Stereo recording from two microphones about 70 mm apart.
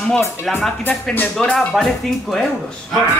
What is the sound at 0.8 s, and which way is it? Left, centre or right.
Speech, left.